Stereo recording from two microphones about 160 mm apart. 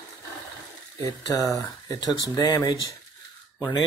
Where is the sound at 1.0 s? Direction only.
20° left (ahead or behind).